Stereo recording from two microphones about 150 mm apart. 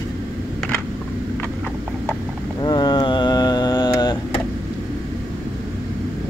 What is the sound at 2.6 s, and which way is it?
Mantra, 30° left (ahead or behind).